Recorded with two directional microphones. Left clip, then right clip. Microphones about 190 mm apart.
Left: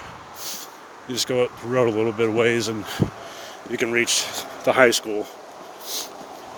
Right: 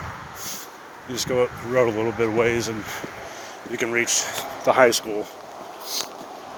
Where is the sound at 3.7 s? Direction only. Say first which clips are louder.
Left 1 dB; 60° left (ahead or behind).